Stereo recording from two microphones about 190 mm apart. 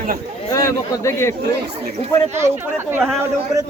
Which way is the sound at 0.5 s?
15° left (ahead or behind).